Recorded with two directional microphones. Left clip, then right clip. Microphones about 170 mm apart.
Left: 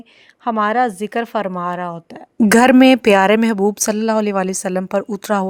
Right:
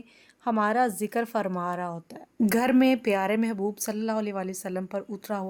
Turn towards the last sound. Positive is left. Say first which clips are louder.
# left 14 dB
turn(degrees=40)  # may be behind; listen again after turning